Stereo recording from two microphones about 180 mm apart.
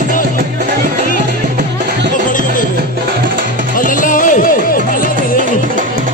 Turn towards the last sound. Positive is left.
turn(degrees=50)  # may be behind; listen again after turning